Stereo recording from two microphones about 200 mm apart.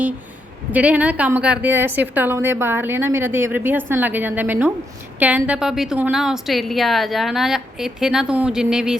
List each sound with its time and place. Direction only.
0.7 s a woman's voice: 5° right (ahead or behind)